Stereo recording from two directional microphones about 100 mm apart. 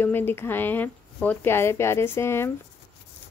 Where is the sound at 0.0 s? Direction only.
20° left (ahead or behind).